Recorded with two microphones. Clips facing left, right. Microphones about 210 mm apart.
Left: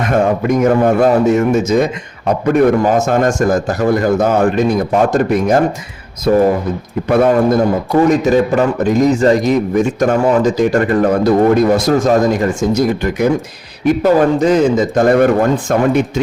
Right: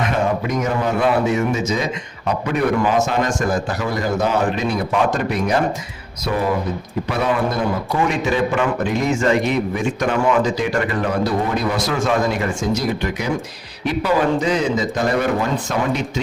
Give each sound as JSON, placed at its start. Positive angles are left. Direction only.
{"t": 0.0, "sound": "a man's voice", "side_deg": 50}